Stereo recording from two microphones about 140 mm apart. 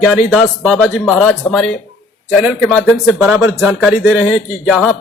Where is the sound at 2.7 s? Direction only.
10° left (ahead or behind).